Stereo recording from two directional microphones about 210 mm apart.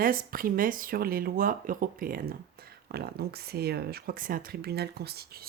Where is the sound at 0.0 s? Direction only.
40° right (ahead or behind).